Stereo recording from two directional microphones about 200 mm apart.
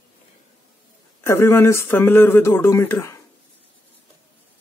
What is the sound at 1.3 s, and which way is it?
Speech, 10° left (ahead or behind).